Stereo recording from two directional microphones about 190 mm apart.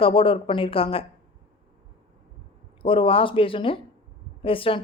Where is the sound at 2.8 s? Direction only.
30° left (ahead or behind).